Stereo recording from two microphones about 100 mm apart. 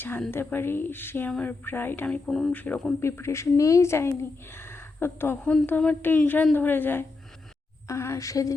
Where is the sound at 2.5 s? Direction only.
15° left (ahead or behind).